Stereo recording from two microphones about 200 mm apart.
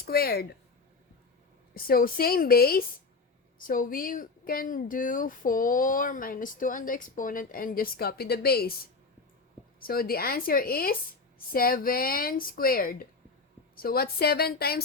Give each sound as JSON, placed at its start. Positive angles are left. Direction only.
{"t": 0.0, "sound": "speech", "side_deg": 50}
{"t": 1.7, "sound": "speech", "side_deg": 45}
{"t": 9.8, "sound": "speech", "side_deg": 45}